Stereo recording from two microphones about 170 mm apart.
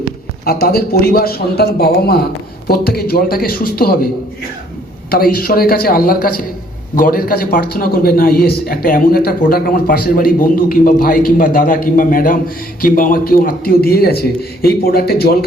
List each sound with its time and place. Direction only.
0.4 s a man's voice: 65° left (ahead or behind)
5.1 s a man's voice: 60° left (ahead or behind)